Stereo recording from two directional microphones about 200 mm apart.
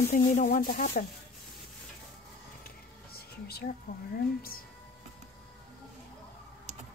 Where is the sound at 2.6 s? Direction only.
50° left (ahead or behind).